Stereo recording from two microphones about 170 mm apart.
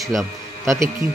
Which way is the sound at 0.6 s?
20° right (ahead or behind).